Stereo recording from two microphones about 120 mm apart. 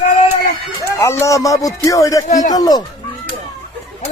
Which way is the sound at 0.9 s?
25° left (ahead or behind).